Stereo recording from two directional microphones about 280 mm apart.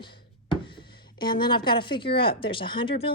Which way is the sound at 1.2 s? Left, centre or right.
Centre.